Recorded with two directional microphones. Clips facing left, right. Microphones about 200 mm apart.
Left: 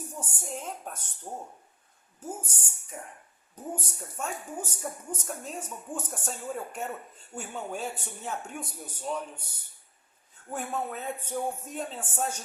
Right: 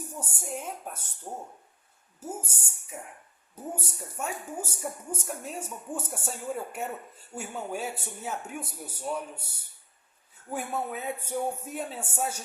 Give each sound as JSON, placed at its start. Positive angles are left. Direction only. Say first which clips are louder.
{"t": 0.2, "sound": "speech", "louder": "right 2 dB", "side_deg": -10}